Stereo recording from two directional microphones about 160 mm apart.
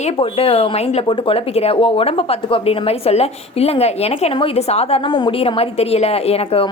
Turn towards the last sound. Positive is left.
turn(degrees=40)  # may be behind; listen again after turning